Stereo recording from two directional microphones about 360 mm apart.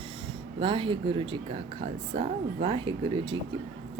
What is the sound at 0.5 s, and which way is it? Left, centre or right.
A woman's voice, centre.